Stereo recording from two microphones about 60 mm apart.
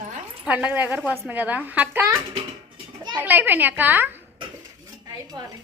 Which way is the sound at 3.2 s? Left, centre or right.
Right.